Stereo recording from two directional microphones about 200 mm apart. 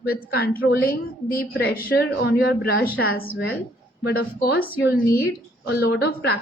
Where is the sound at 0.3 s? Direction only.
50° left (ahead or behind).